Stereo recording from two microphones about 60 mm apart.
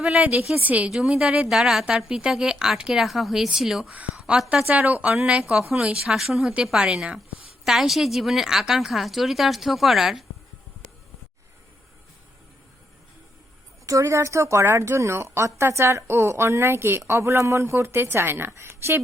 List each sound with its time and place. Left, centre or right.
0.2 s a woman's voice: right
0.9 s speech: centre
1.5 s a woman's voice: centre
6.1 s a woman's voice: centre
6.4 s speech: centre
7.6 s a woman's voice: centre
13.8 s speech: right